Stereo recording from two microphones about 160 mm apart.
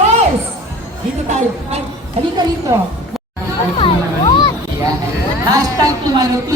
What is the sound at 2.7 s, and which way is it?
Speech, 20° right (ahead or behind).